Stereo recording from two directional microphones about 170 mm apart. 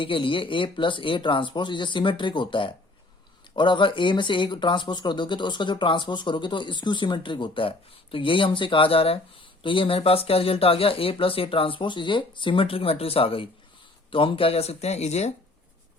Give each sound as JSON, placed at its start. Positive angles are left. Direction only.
{"t": 0.0, "sound": "speech", "side_deg": 30}